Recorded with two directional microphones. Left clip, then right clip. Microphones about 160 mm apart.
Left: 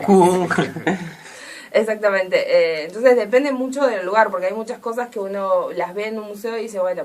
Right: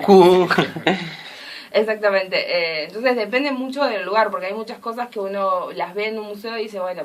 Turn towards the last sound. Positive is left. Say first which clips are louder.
# left 3 dB
turn(degrees=0)  # may be behind; listen again after turning